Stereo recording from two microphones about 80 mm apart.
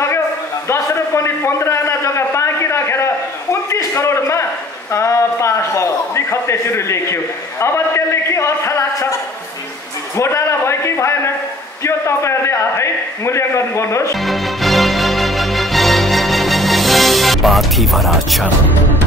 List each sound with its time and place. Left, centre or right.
0.7 s a sound: left
4.9 s a man's voice: left
10.1 s a man's voice: left
14.2 s music: centre